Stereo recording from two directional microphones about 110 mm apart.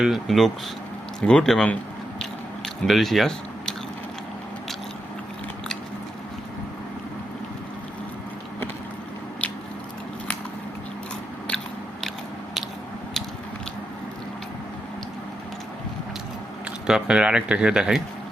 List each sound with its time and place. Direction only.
0.0 s speech: centre (ahead or behind)
2.8 s speech: centre (ahead or behind)
16.8 s speech: 5° right (ahead or behind)